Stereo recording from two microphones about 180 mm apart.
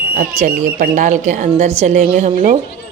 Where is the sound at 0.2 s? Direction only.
50° right (ahead or behind).